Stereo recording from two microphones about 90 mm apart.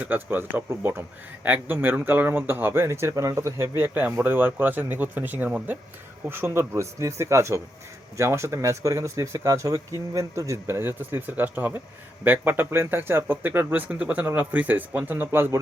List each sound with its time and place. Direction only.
0.0 s speech: 20° right (ahead or behind)